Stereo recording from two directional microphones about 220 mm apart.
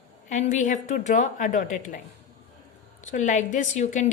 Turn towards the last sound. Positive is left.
turn(degrees=35)  # may be behind; listen again after turning